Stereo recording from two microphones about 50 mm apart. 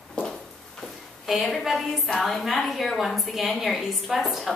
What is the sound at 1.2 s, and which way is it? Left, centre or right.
A woman's voice, centre.